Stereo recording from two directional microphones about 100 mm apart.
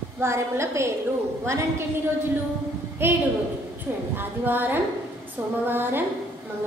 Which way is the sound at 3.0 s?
20° right (ahead or behind).